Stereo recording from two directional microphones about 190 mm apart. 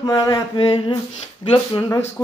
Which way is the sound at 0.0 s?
20° left (ahead or behind).